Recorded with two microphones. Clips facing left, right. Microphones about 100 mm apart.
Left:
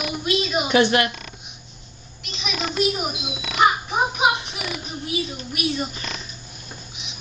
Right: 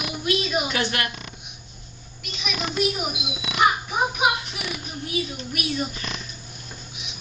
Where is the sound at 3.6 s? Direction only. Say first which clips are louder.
Left 2 dB; centre (ahead or behind).